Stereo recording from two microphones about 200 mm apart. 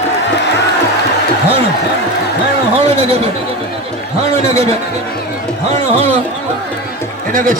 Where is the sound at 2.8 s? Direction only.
30° right (ahead or behind).